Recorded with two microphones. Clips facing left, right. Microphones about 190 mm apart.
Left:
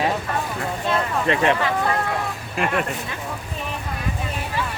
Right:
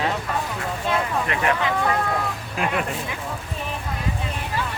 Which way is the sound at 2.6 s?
Centre (ahead or behind).